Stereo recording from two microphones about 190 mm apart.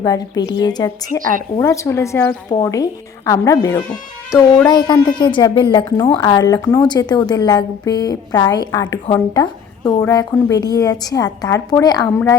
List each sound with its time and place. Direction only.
0.0 s a woman's voice: 20° left (ahead or behind)